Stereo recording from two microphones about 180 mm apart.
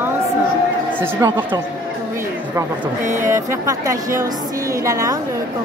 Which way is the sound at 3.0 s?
45° right (ahead or behind).